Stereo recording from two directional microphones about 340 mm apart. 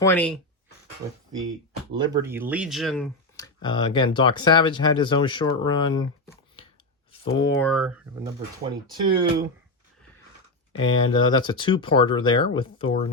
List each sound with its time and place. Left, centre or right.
0.0 s speech: centre
1.9 s speech: centre
10.7 s speech: centre